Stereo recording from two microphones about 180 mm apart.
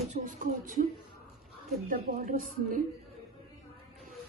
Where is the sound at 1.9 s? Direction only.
50° right (ahead or behind).